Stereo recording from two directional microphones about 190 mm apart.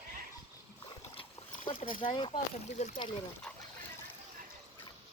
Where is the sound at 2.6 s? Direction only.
35° left (ahead or behind).